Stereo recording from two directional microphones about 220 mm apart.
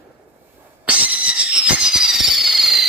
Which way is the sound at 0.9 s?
5° right (ahead or behind).